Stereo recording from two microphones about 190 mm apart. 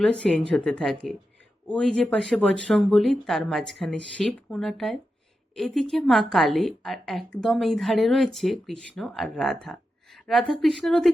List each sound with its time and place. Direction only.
0.0 s a woman's voice: 5° left (ahead or behind)